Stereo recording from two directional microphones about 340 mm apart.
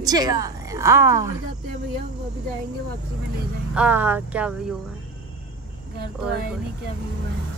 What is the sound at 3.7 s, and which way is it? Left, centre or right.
Speech, centre.